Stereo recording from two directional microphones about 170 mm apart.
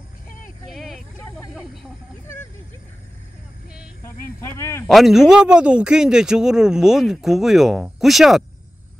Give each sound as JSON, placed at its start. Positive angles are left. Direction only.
{"t": 0.7, "sound": "vehicle", "side_deg": 0}
{"t": 1.5, "sound": "snake", "side_deg": 0}
{"t": 4.0, "sound": "speech", "side_deg": 15}
{"t": 4.8, "sound": "a man's voice", "side_deg": 0}